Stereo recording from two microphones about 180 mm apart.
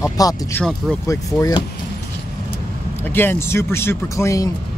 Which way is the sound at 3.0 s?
10° left (ahead or behind).